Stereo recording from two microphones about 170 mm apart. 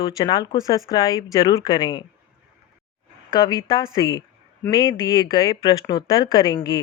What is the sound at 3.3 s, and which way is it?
Speech, 25° left (ahead or behind).